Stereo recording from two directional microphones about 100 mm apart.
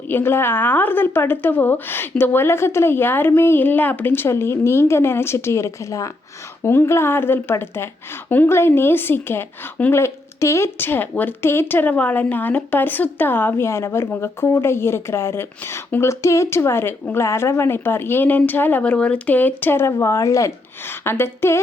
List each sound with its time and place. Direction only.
0.1 s a woman's voice: 25° left (ahead or behind)